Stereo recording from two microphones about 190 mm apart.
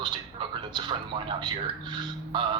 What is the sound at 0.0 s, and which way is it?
A man's voice, 25° right (ahead or behind).